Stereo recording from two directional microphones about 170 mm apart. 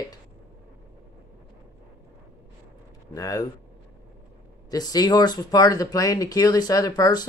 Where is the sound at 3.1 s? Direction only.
20° left (ahead or behind).